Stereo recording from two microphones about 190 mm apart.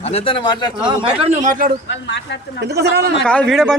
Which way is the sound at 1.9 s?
70° left (ahead or behind).